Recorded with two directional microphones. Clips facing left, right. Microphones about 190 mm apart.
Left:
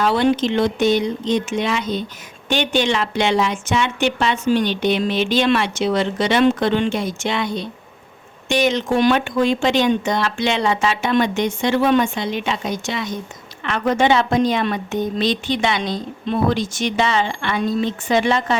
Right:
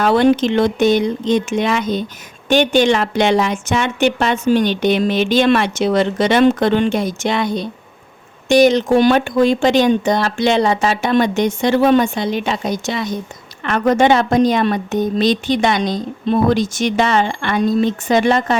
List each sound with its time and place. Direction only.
0.0 s a woman's voice: 50° right (ahead or behind)